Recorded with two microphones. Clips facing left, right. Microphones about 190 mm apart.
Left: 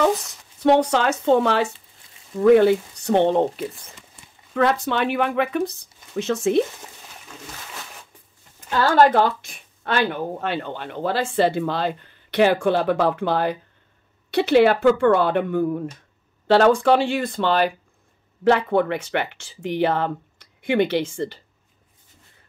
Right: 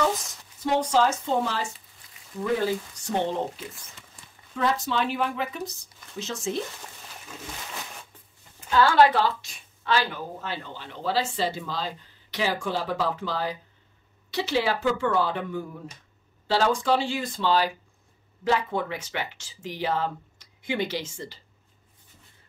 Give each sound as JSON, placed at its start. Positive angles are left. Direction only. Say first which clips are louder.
{"t": 0.6, "sound": "speech", "louder": "left 5 dB", "side_deg": 65}
{"t": 8.6, "sound": "speech", "louder": "left 2 dB", "side_deg": 45}